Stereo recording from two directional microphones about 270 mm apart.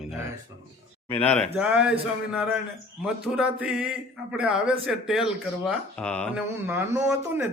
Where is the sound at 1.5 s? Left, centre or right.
Centre.